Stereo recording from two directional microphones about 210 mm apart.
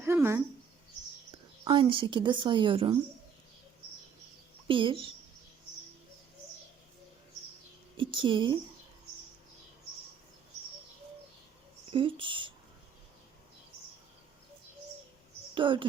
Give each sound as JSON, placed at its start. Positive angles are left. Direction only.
{"t": 0.0, "sound": "a sound", "side_deg": -10}
{"t": 1.6, "sound": "speech", "side_deg": -25}
{"t": 4.7, "sound": "speech", "side_deg": -25}
{"t": 7.9, "sound": "speech", "side_deg": -25}
{"t": 11.9, "sound": "speech", "side_deg": -25}
{"t": 15.5, "sound": "speech", "side_deg": -25}